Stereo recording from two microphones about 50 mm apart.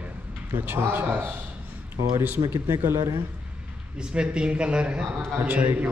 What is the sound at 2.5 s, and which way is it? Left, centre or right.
Speech, right.